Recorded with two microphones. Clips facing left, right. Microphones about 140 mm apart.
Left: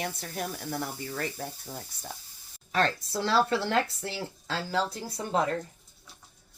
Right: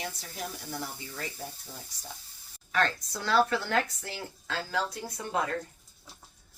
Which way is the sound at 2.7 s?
30° left (ahead or behind).